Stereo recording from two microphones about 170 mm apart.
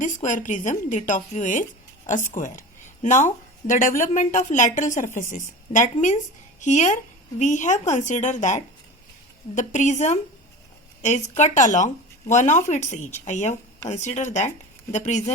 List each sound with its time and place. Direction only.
0.0 s a woman's voice: 45° left (ahead or behind)